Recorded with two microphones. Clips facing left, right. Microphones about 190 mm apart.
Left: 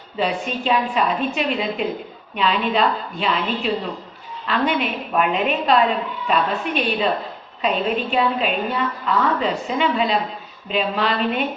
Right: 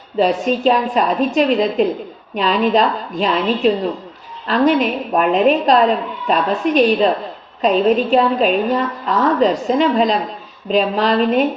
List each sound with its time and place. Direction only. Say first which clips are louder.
0.2 s a woman's voice: right 8 dB; 40° right (ahead or behind)